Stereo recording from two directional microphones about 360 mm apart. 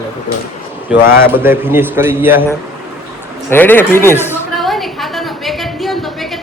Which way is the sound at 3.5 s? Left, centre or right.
Centre.